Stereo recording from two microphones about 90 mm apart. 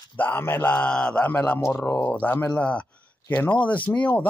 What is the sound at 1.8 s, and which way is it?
Speech, 30° left (ahead or behind).